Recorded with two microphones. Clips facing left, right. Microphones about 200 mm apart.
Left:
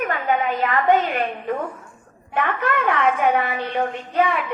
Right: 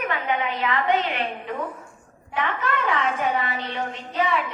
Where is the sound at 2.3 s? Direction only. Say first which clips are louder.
Left 4 dB; 55° left (ahead or behind).